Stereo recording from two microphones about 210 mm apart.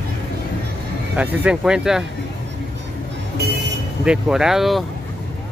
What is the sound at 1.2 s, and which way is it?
Speech, 5° right (ahead or behind).